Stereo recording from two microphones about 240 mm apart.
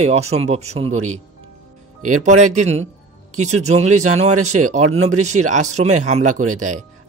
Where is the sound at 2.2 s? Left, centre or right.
Right.